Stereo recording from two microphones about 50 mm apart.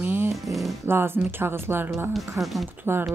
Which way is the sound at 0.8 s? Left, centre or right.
Right.